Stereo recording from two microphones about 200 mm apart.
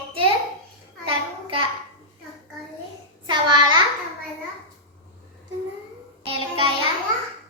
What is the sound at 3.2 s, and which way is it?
Speech, 25° right (ahead or behind).